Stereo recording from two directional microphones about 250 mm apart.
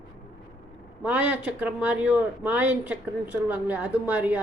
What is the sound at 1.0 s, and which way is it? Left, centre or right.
Speech, centre.